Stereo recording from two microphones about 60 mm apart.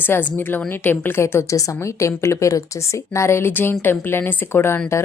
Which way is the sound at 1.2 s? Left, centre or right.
Left.